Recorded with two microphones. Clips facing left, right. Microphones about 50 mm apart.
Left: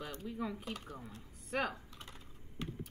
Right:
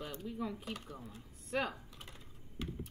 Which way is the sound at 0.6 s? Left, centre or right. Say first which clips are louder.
Even; centre.